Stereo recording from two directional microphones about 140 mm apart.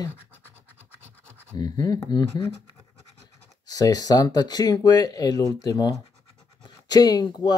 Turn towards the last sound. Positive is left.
turn(degrees=30)  # may be behind; listen again after turning